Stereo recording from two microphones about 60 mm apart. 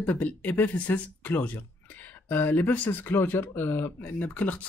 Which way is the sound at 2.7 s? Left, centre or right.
Left.